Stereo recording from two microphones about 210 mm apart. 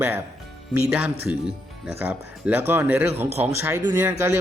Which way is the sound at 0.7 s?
5° right (ahead or behind).